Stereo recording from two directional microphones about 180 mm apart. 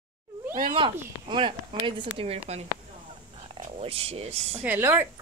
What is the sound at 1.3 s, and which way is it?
Speech, 25° right (ahead or behind).